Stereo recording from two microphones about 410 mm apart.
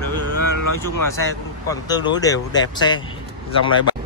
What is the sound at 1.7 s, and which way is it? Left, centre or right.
Speech, centre.